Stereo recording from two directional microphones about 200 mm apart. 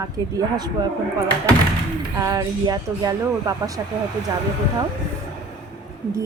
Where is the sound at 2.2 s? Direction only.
15° right (ahead or behind).